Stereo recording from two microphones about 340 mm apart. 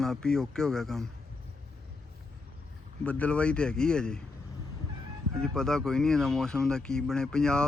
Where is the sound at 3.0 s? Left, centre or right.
Centre.